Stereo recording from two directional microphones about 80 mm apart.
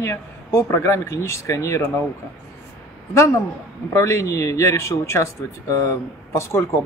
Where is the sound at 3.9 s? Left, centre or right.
Left.